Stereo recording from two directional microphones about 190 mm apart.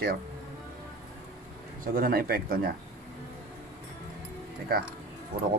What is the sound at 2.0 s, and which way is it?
Speech, 50° right (ahead or behind).